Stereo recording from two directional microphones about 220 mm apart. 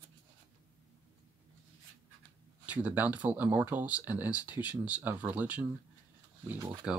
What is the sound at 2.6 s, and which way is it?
Speech, 5° right (ahead or behind).